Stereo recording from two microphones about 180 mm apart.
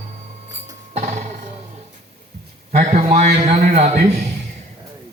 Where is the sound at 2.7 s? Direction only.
40° right (ahead or behind).